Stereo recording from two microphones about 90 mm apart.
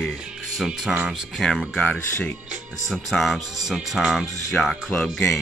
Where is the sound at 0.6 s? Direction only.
5° right (ahead or behind).